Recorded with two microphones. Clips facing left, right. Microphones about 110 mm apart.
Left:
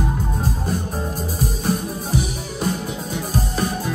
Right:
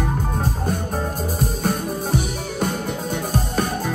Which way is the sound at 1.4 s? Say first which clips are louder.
Left 1 dB; 50° right (ahead or behind).